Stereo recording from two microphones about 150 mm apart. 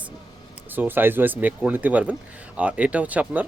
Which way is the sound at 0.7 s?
15° right (ahead or behind).